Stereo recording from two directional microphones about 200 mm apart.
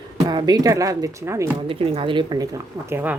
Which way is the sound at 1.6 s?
25° right (ahead or behind).